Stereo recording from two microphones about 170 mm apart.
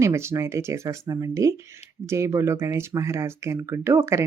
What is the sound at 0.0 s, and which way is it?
Speech, 15° right (ahead or behind).